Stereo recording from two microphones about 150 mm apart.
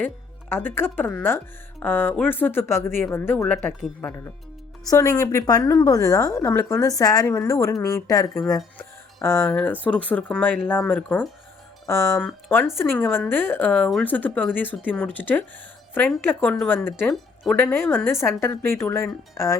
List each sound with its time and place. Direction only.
0.5 s speech: 15° left (ahead or behind)
4.9 s a woman's voice: 20° left (ahead or behind)
9.4 s speech: 5° left (ahead or behind)
17.1 s a woman's voice: 5° left (ahead or behind); by 19.5 s 20° left (ahead or behind)